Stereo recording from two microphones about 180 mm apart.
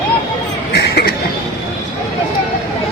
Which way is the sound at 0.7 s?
65° left (ahead or behind).